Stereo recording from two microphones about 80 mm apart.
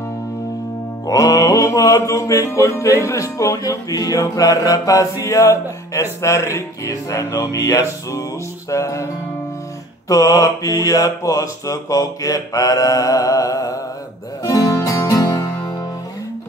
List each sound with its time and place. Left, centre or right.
1.0 s music: left
10.0 s mantra: left
14.4 s music: left